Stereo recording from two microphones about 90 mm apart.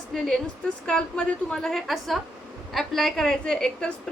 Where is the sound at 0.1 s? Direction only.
5° left (ahead or behind).